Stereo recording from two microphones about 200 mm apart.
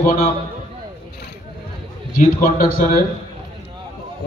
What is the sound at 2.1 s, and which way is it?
Speech, 45° left (ahead or behind).